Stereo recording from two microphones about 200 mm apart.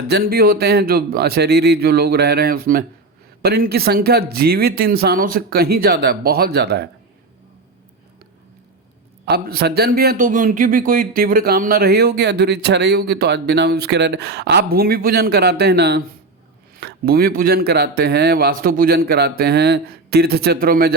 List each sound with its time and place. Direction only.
0.1 s a man's voice: 50° right (ahead or behind)
9.2 s a man's voice: 50° right (ahead or behind)